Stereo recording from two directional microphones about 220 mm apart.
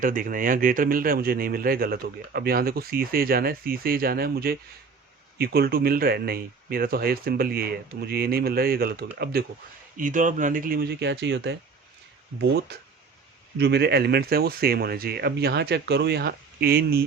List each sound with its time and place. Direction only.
0.0 s speech: 40° right (ahead or behind)